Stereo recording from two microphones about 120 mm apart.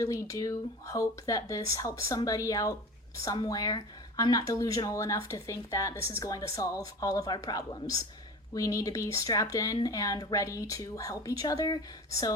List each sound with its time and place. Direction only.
0.0 s speech: 25° left (ahead or behind)